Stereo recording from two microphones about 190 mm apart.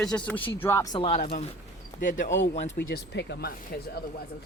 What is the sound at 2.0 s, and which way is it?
Speech, 45° left (ahead or behind).